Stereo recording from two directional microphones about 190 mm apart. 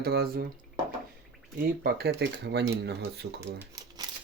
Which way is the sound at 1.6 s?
55° right (ahead or behind).